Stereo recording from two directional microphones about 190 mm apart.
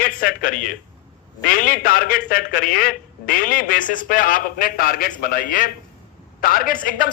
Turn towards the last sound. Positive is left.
turn(degrees=45)  # may be behind; listen again after turning